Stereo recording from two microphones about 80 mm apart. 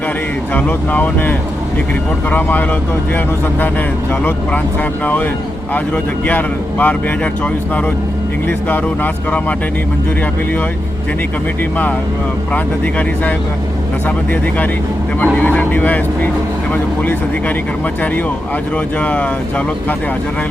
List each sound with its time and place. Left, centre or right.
0.5 s speech: left
4.2 s speech: left
12.5 s speech: centre
15.4 s speech: left
18.9 s speech: left